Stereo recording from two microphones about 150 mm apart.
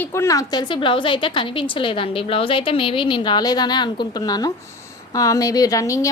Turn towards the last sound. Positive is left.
turn(degrees=20)  # may be behind; listen again after turning